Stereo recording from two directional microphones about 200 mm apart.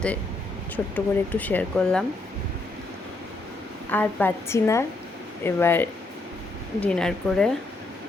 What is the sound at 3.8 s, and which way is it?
Speech, 10° left (ahead or behind).